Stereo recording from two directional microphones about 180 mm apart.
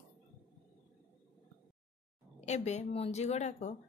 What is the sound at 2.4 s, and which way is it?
A woman's voice, 40° left (ahead or behind).